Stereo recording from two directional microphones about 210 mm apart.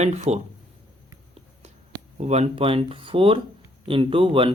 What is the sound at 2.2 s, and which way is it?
Speech, 30° right (ahead or behind).